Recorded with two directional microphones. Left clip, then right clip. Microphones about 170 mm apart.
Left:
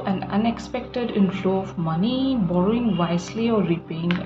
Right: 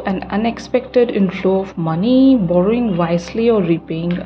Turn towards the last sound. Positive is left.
turn(degrees=-40)  # may be behind; listen again after turning